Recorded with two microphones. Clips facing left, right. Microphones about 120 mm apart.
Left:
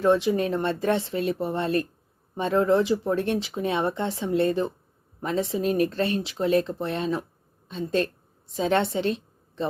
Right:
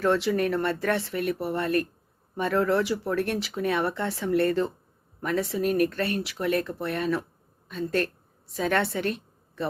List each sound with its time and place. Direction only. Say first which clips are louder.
0.0 s a woman's voice: left 2 dB; 15° left (ahead or behind)